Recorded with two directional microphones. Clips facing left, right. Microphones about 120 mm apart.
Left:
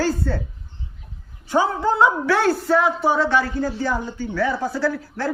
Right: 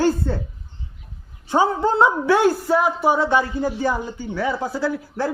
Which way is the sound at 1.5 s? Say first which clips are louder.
Right 1 dB; 25° right (ahead or behind).